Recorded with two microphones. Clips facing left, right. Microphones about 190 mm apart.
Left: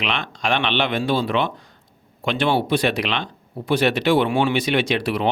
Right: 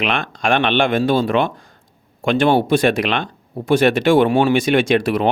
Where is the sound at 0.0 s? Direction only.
50° right (ahead or behind).